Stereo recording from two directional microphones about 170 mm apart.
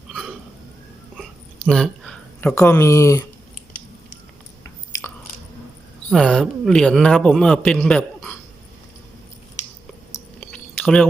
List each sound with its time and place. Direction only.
0.1 s a sound: centre (ahead or behind)
2.6 s speech: 15° left (ahead or behind)
4.6 s chewing: 15° left (ahead or behind)
6.1 s a man's voice: 5° left (ahead or behind)
10.5 s chewing: 5° left (ahead or behind)